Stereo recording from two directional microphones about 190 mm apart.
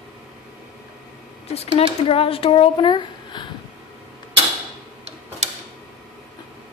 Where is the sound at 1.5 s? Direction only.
30° left (ahead or behind).